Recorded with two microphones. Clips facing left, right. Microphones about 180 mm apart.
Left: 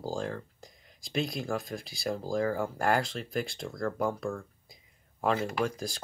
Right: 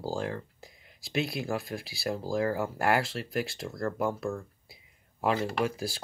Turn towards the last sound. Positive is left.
turn(degrees=-5)  # may be behind; listen again after turning